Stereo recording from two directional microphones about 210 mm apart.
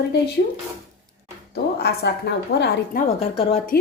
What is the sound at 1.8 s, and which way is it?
A woman's voice, 50° left (ahead or behind).